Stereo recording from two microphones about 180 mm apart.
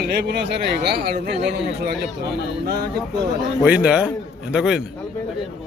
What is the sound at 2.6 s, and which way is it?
Speech, 65° right (ahead or behind).